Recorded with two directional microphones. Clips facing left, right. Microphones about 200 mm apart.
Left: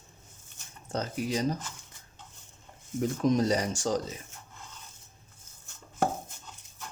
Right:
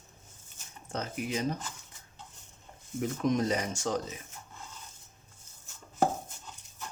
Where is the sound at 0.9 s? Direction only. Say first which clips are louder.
Left 3 dB; 35° left (ahead or behind).